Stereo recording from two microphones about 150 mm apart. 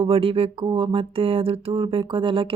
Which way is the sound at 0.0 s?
40° right (ahead or behind).